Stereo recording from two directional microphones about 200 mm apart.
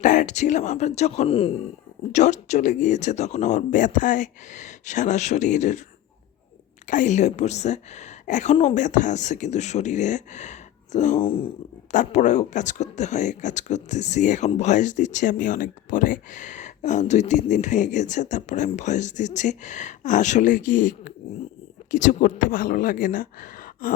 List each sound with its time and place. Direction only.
0.0 s speech: 40° left (ahead or behind)
6.8 s speech: 40° left (ahead or behind)